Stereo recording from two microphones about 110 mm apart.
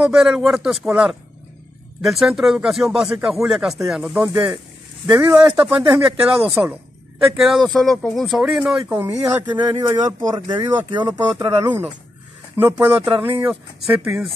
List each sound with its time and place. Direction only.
0.0 s speech: 5° right (ahead or behind)
5.0 s speech: 35° right (ahead or behind)
5.4 s speech: 10° right (ahead or behind)
7.2 s speech: centre (ahead or behind)
8.8 s speech: 15° right (ahead or behind)
9.6 s speech: 35° right (ahead or behind)
12.5 s speech: 20° right (ahead or behind); by 14.3 s 5° right (ahead or behind)